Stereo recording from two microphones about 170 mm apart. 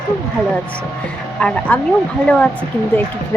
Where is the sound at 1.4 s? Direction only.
5° left (ahead or behind).